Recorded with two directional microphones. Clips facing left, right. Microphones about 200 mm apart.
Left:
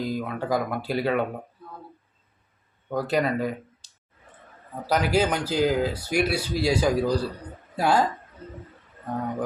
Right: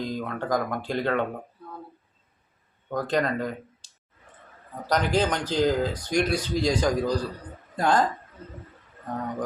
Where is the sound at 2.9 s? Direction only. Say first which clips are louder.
Left 1 dB; 5° left (ahead or behind).